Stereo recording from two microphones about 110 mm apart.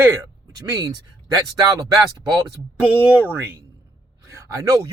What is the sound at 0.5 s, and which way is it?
A man's voice, 35° right (ahead or behind).